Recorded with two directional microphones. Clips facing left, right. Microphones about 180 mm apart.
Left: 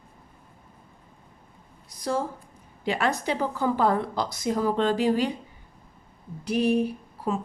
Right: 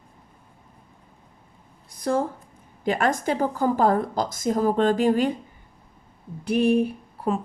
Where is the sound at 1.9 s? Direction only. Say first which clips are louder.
Right 4 dB; 55° right (ahead or behind).